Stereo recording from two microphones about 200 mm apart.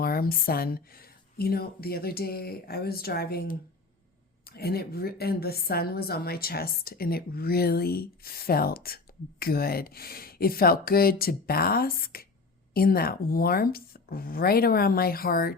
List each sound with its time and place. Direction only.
0.0 s a woman's voice: 50° left (ahead or behind)